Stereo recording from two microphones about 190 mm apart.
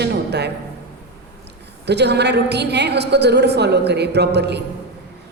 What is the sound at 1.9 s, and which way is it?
A woman's voice, 60° right (ahead or behind).